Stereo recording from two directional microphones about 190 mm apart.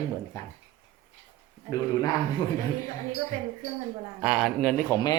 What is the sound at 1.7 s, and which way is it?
Speech, 20° left (ahead or behind).